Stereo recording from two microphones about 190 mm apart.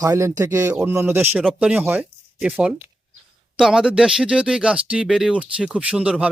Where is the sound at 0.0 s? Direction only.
15° right (ahead or behind).